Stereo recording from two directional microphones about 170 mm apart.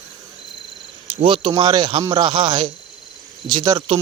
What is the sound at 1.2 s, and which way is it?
Speech, 30° right (ahead or behind).